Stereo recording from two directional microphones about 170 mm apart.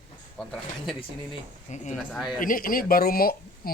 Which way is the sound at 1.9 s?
Centre (ahead or behind).